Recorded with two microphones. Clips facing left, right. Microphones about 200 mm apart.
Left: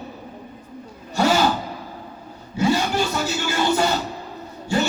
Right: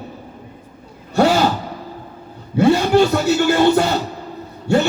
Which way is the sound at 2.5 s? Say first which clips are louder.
Right 7 dB; 60° right (ahead or behind).